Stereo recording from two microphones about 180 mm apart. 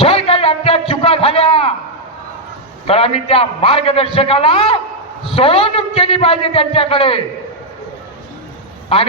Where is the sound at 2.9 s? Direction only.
35° left (ahead or behind).